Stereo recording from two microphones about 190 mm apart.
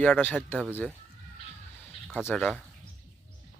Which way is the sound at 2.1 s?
10° left (ahead or behind).